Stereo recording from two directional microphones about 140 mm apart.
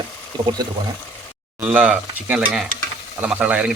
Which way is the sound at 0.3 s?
30° right (ahead or behind).